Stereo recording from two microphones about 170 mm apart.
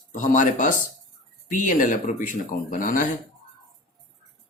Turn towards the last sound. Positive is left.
turn(degrees=50)  # may be behind; listen again after turning